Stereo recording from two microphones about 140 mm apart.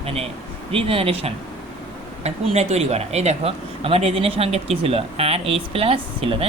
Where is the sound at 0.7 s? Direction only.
40° right (ahead or behind).